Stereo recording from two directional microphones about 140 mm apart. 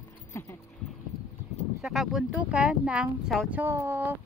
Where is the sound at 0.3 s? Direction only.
20° left (ahead or behind).